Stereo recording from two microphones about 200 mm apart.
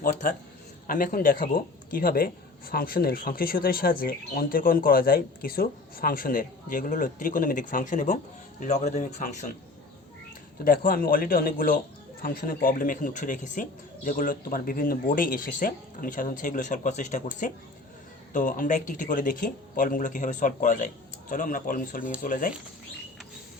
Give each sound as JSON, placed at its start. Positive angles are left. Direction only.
{"t": 0.0, "sound": "a man's voice", "side_deg": 40}
{"t": 10.6, "sound": "speech", "side_deg": 45}